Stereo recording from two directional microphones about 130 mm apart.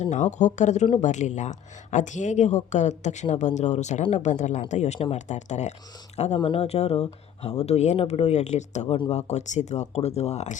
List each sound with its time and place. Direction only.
0.0 s speech: 65° left (ahead or behind)